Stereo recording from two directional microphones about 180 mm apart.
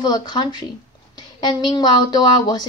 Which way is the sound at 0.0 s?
25° left (ahead or behind).